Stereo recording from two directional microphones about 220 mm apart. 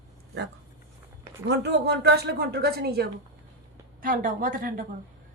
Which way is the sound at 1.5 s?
50° right (ahead or behind).